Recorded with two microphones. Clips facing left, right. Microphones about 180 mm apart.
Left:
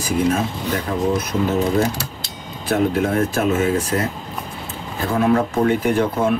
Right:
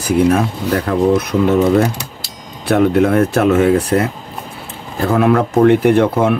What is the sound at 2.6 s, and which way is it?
Speech, 65° right (ahead or behind).